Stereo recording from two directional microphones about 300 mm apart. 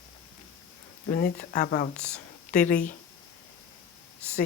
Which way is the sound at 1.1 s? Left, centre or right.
Left.